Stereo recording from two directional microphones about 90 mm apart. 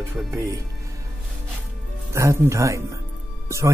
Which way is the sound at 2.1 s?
35° right (ahead or behind).